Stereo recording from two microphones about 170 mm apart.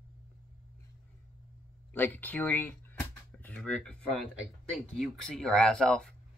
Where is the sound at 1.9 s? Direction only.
10° left (ahead or behind).